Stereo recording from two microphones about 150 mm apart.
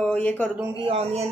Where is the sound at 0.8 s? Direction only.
45° right (ahead or behind).